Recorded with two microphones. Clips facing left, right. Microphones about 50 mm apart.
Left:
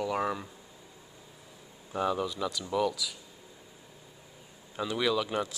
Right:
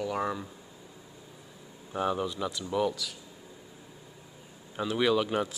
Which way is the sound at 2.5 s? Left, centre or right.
Centre.